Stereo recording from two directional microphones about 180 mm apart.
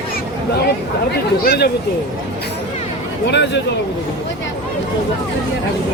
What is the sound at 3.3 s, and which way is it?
Speech, 75° left (ahead or behind).